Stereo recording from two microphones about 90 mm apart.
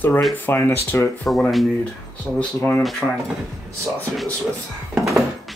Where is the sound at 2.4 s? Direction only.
15° left (ahead or behind).